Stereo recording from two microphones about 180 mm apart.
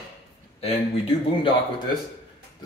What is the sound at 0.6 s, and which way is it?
Speech, 35° left (ahead or behind).